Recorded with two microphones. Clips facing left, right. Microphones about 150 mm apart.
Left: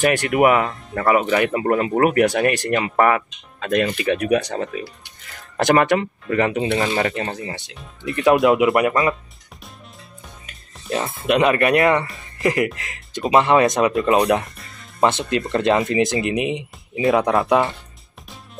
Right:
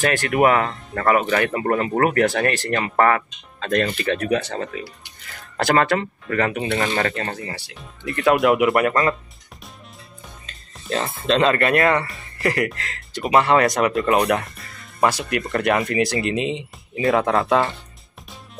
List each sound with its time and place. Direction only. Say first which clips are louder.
0.0 s speech: left 2 dB; 15° left (ahead or behind)
10.4 s speech: even; 15° left (ahead or behind)